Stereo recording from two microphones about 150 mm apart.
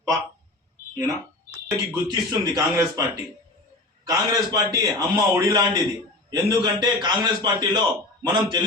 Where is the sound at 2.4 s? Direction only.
20° right (ahead or behind).